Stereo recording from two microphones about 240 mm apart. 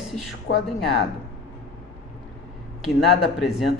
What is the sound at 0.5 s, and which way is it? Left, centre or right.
Speech, left.